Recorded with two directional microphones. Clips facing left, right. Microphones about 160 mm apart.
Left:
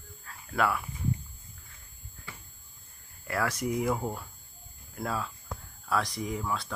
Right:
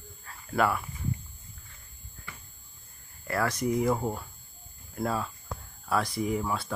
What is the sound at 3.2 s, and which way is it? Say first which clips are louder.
Speech: right 2 dB; 5° left (ahead or behind).